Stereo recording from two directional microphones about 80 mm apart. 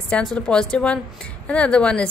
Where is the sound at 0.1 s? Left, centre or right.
Centre.